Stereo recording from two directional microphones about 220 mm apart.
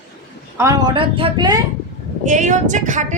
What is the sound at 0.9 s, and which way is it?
Speech, 25° right (ahead or behind).